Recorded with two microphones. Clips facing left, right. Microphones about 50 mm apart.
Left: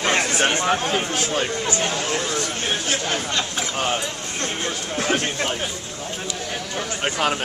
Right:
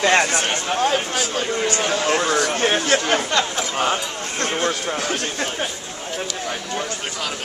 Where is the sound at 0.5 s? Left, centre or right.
Left.